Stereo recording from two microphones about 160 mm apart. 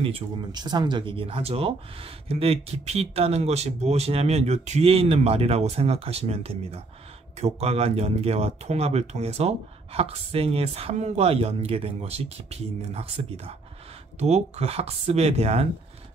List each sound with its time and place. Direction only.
0.0 s speech: 30° right (ahead or behind)